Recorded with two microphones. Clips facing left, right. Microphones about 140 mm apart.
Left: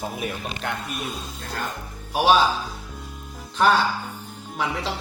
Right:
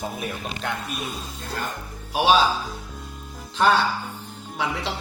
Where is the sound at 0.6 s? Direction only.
Centre (ahead or behind).